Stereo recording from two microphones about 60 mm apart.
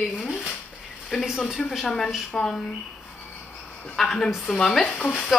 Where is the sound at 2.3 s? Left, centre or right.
Centre.